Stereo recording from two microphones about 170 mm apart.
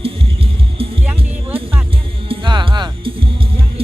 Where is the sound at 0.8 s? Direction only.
35° right (ahead or behind).